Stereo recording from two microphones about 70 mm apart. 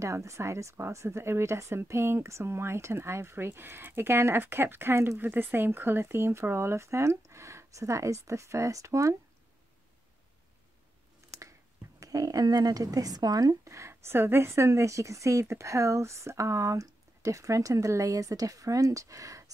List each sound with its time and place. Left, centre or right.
0.0 s speech: right
12.0 s speech: right
13.7 s speech: right